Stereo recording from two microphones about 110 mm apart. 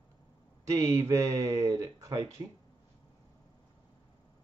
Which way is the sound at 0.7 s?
30° right (ahead or behind).